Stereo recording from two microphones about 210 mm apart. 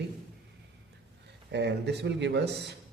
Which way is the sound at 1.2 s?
55° right (ahead or behind).